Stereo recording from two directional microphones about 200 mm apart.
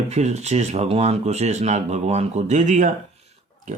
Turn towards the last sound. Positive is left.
turn(degrees=-35)  # may be behind; listen again after turning